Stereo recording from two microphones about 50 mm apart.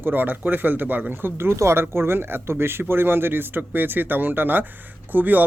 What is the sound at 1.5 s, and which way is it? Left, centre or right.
Speech, right.